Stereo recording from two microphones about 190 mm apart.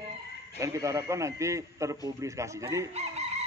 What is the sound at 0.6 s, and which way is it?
Speech, 15° right (ahead or behind).